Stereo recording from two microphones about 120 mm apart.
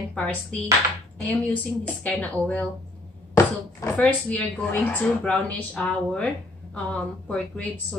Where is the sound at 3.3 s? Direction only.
25° left (ahead or behind).